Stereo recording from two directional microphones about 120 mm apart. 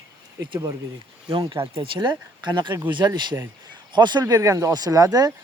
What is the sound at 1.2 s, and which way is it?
Speech, 40° right (ahead or behind).